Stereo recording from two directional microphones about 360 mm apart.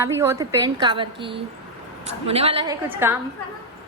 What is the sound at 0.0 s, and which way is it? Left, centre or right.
A woman's voice, centre.